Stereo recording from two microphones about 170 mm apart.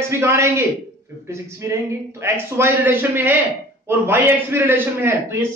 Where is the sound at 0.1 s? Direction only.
15° right (ahead or behind).